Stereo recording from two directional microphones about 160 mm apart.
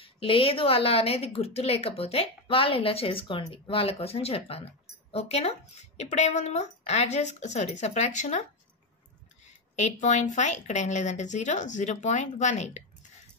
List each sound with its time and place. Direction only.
0.0 s a woman's voice: 35° left (ahead or behind)
9.8 s a woman's voice: 50° left (ahead or behind)